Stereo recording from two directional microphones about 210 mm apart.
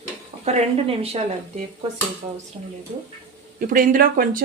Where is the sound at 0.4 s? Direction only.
30° right (ahead or behind).